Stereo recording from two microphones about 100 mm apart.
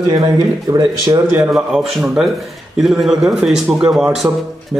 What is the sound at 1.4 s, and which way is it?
Speech, 5° right (ahead or behind).